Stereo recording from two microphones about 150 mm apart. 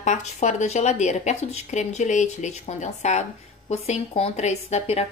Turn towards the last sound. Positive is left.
turn(degrees=45)  # may be behind; listen again after turning